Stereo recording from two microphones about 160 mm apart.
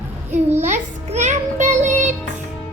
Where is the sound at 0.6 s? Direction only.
45° right (ahead or behind).